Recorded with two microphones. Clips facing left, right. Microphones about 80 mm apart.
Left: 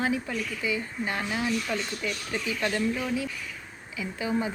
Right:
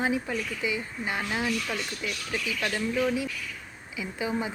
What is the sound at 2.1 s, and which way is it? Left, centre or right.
Speech, left.